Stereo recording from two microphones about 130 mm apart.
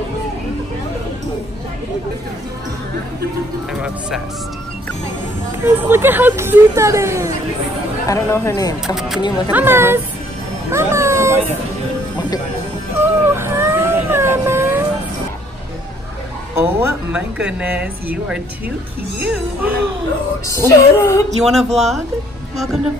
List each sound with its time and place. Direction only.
5.6 s speech: 15° right (ahead or behind)
8.1 s speech: 25° left (ahead or behind)
8.8 s speech: 5° right (ahead or behind)
9.5 s a man's voice: 15° right (ahead or behind)
10.7 s cat: 20° right (ahead or behind)
13.0 s a sound: 15° right (ahead or behind)
16.5 s a man's voice: 20° right (ahead or behind)
19.2 s a man's voice: 10° right (ahead or behind)
20.4 s speech: 25° left (ahead or behind)
21.3 s speech: 60° right (ahead or behind)